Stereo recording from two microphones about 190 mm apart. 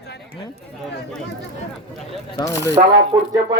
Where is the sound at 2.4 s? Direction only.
15° left (ahead or behind).